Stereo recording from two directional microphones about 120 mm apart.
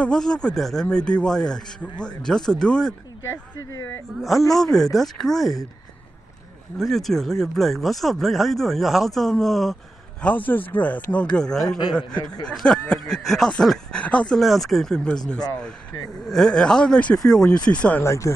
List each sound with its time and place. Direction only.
0.0 s speech: 5° left (ahead or behind)
4.2 s speech: centre (ahead or behind)
6.8 s speech: centre (ahead or behind)
10.2 s speech: 15° left (ahead or behind)
12.1 s speech: 35° left (ahead or behind)
12.4 s speech: 5° left (ahead or behind)
18.0 s speech: 25° left (ahead or behind)